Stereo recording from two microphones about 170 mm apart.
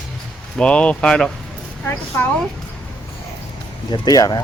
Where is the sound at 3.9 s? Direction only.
25° left (ahead or behind).